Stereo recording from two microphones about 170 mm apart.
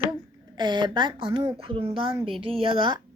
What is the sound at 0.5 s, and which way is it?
A woman's voice, 25° right (ahead or behind).